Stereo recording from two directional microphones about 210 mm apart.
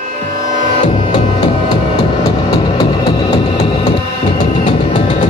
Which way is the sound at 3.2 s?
25° left (ahead or behind).